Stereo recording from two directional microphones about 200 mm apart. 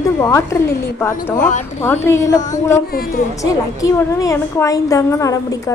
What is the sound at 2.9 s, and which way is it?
Speech, 45° left (ahead or behind).